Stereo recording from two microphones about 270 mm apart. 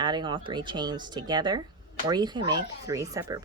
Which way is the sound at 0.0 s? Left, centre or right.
Centre.